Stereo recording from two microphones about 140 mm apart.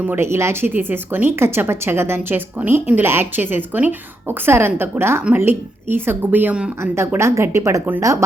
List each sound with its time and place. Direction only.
0.0 s a woman's voice: 15° right (ahead or behind)